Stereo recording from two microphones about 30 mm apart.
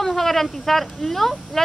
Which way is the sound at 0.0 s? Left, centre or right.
Centre.